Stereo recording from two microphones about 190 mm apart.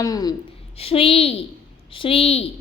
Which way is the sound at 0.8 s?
30° left (ahead or behind).